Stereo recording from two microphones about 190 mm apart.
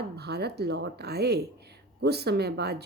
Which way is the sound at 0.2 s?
60° right (ahead or behind).